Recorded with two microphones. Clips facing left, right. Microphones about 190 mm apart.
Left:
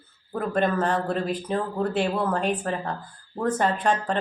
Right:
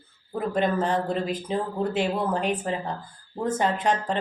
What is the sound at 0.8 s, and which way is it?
A woman's voice, 10° right (ahead or behind).